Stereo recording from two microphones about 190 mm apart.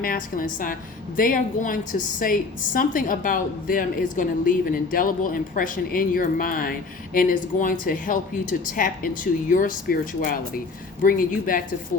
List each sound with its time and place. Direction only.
0.0 s a woman's voice: 45° left (ahead or behind)